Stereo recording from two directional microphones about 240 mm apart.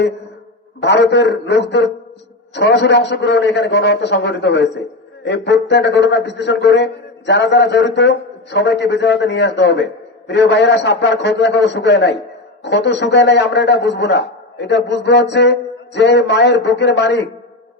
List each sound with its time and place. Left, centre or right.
0.8 s a man's voice: left